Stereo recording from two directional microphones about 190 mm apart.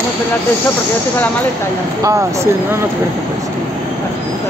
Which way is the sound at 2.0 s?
15° right (ahead or behind).